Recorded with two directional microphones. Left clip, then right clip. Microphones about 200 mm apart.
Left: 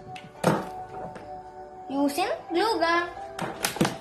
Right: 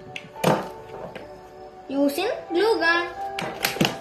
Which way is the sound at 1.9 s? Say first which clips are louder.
Right 3 dB; 15° left (ahead or behind).